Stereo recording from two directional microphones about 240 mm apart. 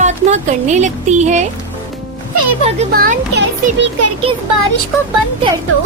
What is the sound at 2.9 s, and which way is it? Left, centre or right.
A woman's voice, right.